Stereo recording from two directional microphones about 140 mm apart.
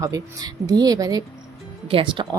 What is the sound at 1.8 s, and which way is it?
Speech, 40° right (ahead or behind).